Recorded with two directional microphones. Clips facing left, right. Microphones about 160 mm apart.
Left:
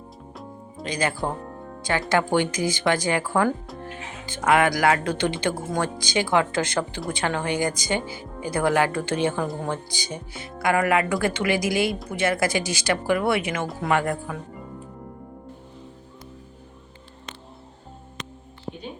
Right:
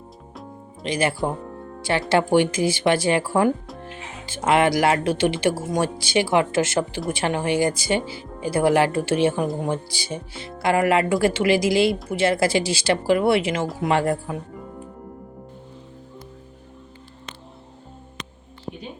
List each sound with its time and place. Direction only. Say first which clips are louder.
0.8 s a woman's voice: right 3 dB; 25° right (ahead or behind)